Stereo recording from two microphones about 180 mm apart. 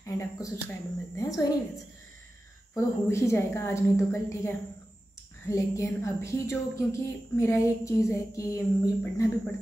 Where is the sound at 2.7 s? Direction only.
15° left (ahead or behind).